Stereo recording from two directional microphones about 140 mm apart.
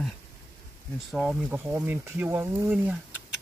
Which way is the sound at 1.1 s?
5° right (ahead or behind).